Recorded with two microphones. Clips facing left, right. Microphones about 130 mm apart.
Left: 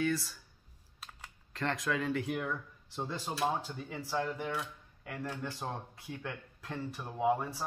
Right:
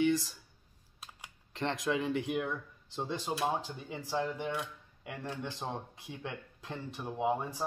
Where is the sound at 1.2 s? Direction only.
20° right (ahead or behind).